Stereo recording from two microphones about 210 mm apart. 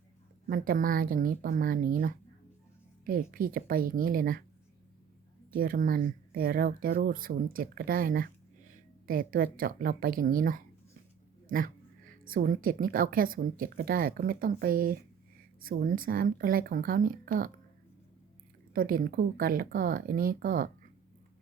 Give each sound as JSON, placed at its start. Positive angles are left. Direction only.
{"t": 0.4, "sound": "a woman's voice", "side_deg": -40}
{"t": 5.5, "sound": "a woman's voice", "side_deg": -40}
{"t": 18.7, "sound": "speech", "side_deg": -40}